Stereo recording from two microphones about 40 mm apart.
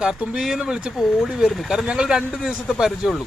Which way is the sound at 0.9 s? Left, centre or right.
Centre.